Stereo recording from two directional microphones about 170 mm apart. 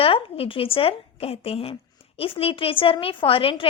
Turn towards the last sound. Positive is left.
turn(degrees=30)  # may be behind; listen again after turning